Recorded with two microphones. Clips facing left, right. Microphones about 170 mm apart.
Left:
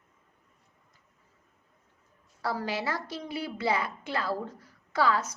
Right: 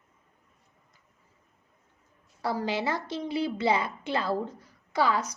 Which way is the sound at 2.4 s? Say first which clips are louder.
Right 3 dB; 20° right (ahead or behind).